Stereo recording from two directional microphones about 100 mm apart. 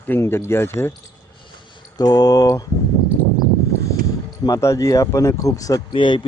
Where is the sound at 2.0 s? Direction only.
40° left (ahead or behind).